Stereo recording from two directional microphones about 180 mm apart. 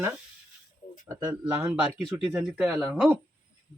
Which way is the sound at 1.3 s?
15° right (ahead or behind).